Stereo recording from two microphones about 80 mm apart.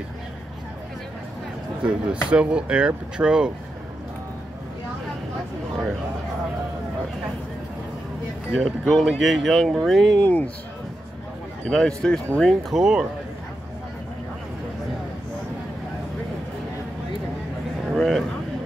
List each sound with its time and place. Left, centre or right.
1.8 s speech: centre
8.5 s speech: centre
10.1 s speech: centre
11.6 s speech: centre
12.6 s speech: centre
17.9 s a sound: centre